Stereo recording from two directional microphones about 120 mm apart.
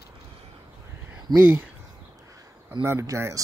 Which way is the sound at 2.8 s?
25° right (ahead or behind).